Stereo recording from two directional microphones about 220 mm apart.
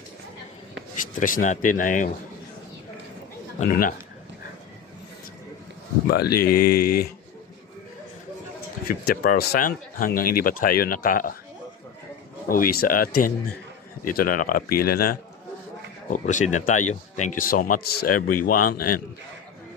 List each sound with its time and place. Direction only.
0.9 s speech: 35° left (ahead or behind)
3.5 s speech: 35° left (ahead or behind)
6.0 s speech: 45° left (ahead or behind)
9.0 s speech: 40° left (ahead or behind)
12.4 s speech: 40° left (ahead or behind)